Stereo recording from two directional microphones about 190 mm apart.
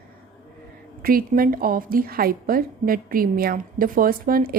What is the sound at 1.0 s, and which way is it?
A woman's voice, 50° right (ahead or behind).